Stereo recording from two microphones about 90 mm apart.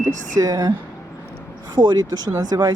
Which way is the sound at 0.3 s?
45° right (ahead or behind).